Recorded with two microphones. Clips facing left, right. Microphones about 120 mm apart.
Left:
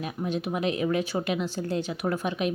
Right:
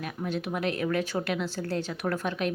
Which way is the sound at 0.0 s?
15° left (ahead or behind).